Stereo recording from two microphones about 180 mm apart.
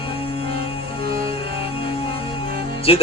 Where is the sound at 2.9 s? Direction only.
30° left (ahead or behind).